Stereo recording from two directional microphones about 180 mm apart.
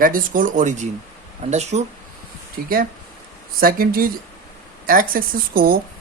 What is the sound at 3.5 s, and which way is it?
Speech, 55° right (ahead or behind).